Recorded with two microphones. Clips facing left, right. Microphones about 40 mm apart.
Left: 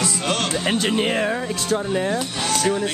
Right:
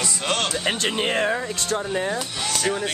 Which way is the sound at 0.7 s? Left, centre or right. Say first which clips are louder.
Left 4 dB; centre.